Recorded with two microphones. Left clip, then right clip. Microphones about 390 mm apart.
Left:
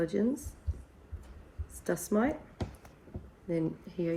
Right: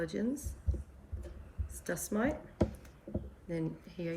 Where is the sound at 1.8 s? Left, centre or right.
Centre.